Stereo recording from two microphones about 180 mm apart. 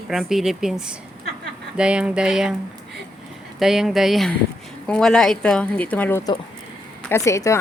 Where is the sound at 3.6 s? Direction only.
Centre (ahead or behind); by 7.6 s 15° left (ahead or behind).